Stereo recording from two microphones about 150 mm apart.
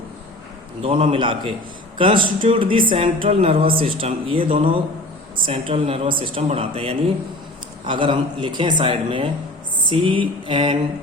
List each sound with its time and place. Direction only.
0.8 s speech: 40° right (ahead or behind)